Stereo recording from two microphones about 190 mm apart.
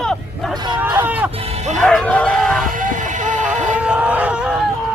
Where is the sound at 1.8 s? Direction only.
5° left (ahead or behind).